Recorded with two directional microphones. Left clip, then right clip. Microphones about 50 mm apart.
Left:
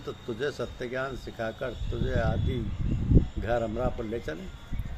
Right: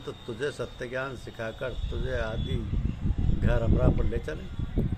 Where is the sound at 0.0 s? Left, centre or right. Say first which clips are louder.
Left 1 dB; right.